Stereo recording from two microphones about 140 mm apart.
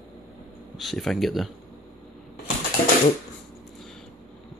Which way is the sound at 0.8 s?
Centre (ahead or behind).